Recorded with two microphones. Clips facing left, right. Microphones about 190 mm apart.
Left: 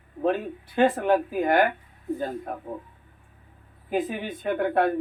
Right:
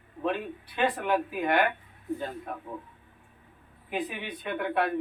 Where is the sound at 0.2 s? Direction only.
40° left (ahead or behind).